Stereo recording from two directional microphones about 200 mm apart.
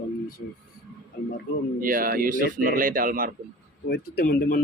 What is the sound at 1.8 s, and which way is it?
Speech, 45° right (ahead or behind).